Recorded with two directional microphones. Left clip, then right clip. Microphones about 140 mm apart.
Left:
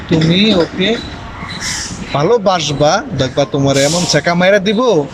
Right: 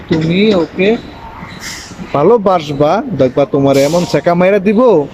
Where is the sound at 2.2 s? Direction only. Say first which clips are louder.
Right 3 dB; 30° right (ahead or behind).